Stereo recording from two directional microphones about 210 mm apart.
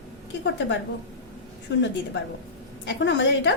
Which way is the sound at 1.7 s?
60° left (ahead or behind).